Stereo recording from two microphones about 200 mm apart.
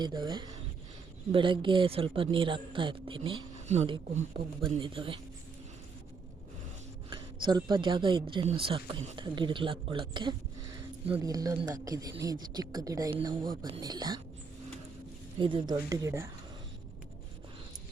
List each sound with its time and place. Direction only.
0.0 s speech: 20° right (ahead or behind)
7.4 s speech: 25° right (ahead or behind)
15.4 s speech: 25° right (ahead or behind)